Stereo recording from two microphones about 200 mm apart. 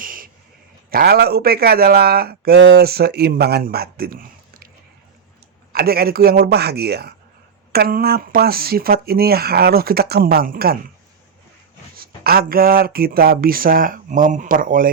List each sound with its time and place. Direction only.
0.0 s a sound: 45° right (ahead or behind)
0.9 s speech: 50° right (ahead or behind)
5.7 s speech: 50° right (ahead or behind)
11.9 s speech: 50° right (ahead or behind)